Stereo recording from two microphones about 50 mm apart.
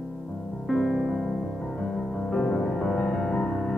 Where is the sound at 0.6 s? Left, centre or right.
Centre.